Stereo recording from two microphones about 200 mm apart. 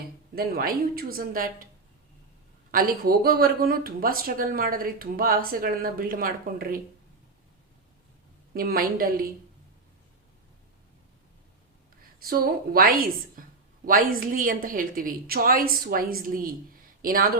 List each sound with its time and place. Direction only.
0.3 s speech: 50° right (ahead or behind)
2.7 s speech: 50° right (ahead or behind)
8.5 s speech: 45° right (ahead or behind)
12.2 s speech: 45° right (ahead or behind)